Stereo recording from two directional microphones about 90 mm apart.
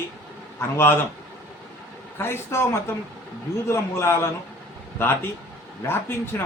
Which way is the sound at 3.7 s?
30° left (ahead or behind).